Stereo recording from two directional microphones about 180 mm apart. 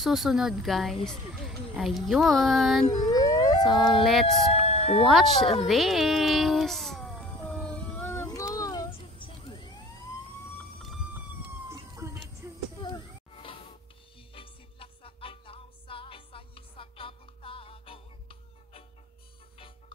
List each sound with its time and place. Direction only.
0.0 s speech: centre (ahead or behind)
3.3 s a sound: 20° left (ahead or behind)
3.6 s speech: centre (ahead or behind)
4.5 s music: 35° left (ahead or behind)
5.0 s speech: centre (ahead or behind)
5.6 s music: centre (ahead or behind); by 9.7 s 25° left (ahead or behind)
11.7 s a sound: 15° right (ahead or behind)
12.8 s a sound: 30° left (ahead or behind)
14.3 s music: 30° left (ahead or behind)